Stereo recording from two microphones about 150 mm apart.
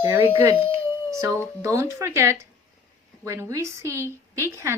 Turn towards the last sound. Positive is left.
turn(degrees=-15)  # may be behind; listen again after turning